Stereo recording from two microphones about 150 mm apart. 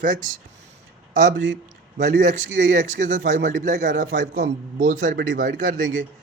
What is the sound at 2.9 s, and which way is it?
A man's voice, 55° right (ahead or behind).